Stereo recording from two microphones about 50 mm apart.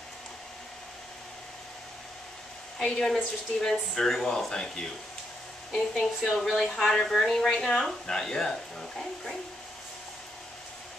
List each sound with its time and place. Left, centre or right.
2.8 s speech: centre
6.5 s speech: centre
6.8 s speech: centre